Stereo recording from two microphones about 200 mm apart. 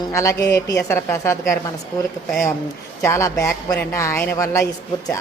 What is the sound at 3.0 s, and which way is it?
Speech, 15° left (ahead or behind).